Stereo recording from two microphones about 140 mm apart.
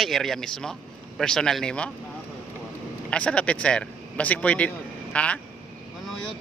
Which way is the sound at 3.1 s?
10° left (ahead or behind).